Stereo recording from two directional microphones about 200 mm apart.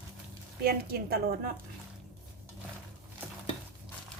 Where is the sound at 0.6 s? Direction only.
50° right (ahead or behind).